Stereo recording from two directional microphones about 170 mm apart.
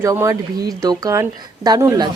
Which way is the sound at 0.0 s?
15° right (ahead or behind).